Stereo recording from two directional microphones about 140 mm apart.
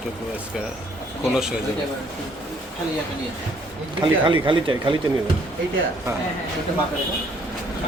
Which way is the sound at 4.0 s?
35° right (ahead or behind).